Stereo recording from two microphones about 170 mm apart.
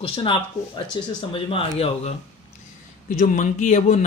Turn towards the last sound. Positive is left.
turn(degrees=45)  # may be behind; listen again after turning